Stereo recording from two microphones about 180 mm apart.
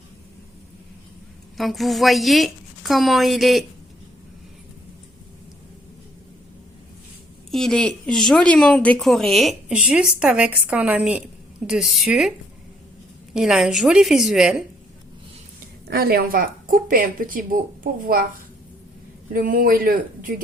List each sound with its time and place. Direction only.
1.5 s a woman's voice: centre (ahead or behind)
7.5 s a woman's voice: 5° left (ahead or behind)
13.3 s a woman's voice: 5° right (ahead or behind)
15.9 s speech: 60° right (ahead or behind)